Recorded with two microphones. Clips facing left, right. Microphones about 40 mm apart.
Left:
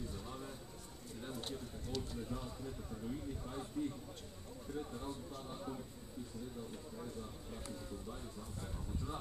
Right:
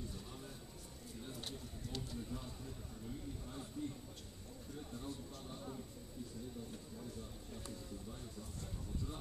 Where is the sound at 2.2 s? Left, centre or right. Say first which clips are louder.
Left 3 dB; centre.